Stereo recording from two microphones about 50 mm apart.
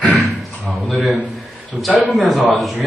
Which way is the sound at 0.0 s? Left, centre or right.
Centre.